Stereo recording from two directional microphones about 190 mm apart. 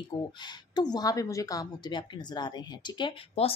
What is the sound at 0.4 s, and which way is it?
Speech, 25° left (ahead or behind).